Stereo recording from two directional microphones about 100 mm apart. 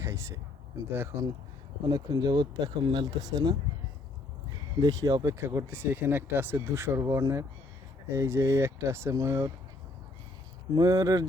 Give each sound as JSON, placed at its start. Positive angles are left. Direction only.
{"t": 0.0, "sound": "a sound", "side_deg": -30}
{"t": 0.9, "sound": "speech", "side_deg": -25}
{"t": 1.9, "sound": "speech", "side_deg": -45}
{"t": 4.8, "sound": "speech", "side_deg": -35}
{"t": 10.8, "sound": "speech", "side_deg": -40}